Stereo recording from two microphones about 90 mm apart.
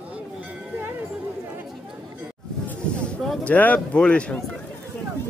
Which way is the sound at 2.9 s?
10° left (ahead or behind).